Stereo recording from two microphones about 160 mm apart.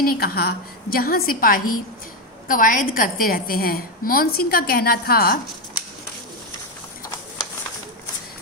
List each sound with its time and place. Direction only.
0.0 s a woman's voice: 70° left (ahead or behind)